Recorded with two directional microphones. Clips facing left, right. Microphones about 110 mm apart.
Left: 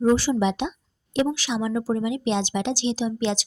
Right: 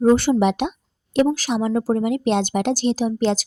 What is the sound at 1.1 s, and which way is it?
Speech, 45° right (ahead or behind).